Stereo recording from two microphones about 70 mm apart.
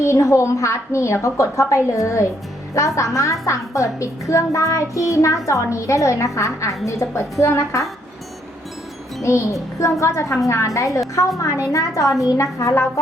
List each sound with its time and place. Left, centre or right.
0.0 s child singing: left
9.2 s child singing: left